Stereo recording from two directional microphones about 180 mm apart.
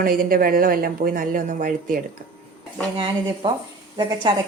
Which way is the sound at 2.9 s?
30° right (ahead or behind).